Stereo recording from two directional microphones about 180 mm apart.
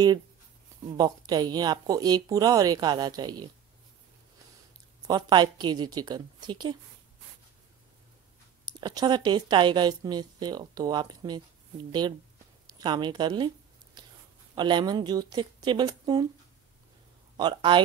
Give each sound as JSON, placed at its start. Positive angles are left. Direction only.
{"t": 0.8, "sound": "speech", "side_deg": -20}
{"t": 5.0, "sound": "speech", "side_deg": -20}
{"t": 8.6, "sound": "speech", "side_deg": -25}
{"t": 12.6, "sound": "a woman's voice", "side_deg": -20}
{"t": 14.5, "sound": "speech", "side_deg": -25}
{"t": 17.4, "sound": "speech", "side_deg": -25}